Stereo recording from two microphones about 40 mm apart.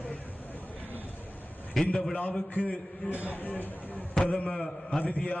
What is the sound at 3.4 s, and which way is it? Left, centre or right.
A man's voice, left.